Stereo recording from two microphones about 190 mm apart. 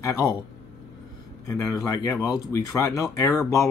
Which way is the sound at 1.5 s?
15° left (ahead or behind).